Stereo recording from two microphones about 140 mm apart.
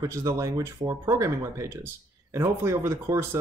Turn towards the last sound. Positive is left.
turn(degrees=-20)  # may be behind; listen again after turning